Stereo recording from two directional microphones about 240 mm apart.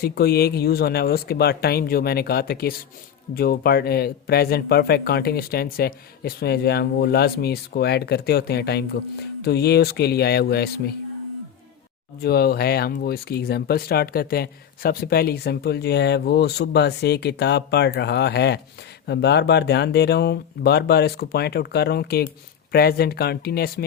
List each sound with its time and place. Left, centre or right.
0.0 s speech: left
12.2 s speech: left